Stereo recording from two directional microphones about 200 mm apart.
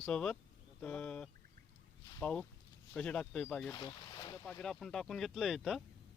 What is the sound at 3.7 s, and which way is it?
Boat, 20° left (ahead or behind).